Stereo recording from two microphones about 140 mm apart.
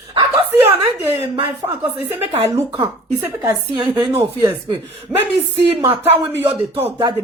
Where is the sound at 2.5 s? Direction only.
20° right (ahead or behind).